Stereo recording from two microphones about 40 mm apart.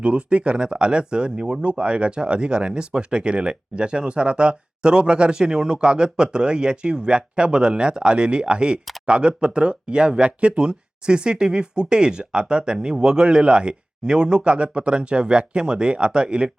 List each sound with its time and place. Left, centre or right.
0.0 s speech: right